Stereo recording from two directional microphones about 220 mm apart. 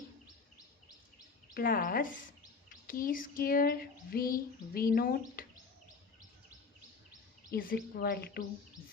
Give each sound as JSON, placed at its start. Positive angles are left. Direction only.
{"t": 1.5, "sound": "speech", "side_deg": 40}
{"t": 7.5, "sound": "a woman's voice", "side_deg": 45}